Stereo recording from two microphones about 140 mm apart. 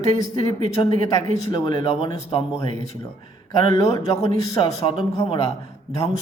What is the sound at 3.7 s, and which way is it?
Speech, 25° left (ahead or behind).